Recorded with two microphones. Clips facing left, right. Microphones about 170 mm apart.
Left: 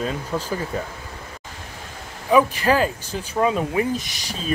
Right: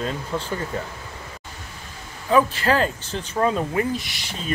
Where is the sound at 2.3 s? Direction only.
15° left (ahead or behind).